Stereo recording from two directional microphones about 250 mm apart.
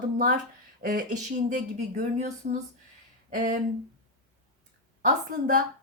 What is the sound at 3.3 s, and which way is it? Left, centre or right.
Speech, right.